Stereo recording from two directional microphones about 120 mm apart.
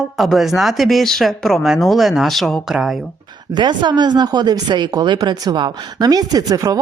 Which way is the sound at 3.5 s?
40° right (ahead or behind).